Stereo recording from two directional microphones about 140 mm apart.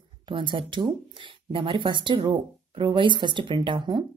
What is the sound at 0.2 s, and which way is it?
Speech, 35° right (ahead or behind).